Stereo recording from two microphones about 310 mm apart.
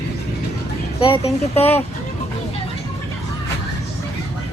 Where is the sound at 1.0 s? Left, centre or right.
Centre.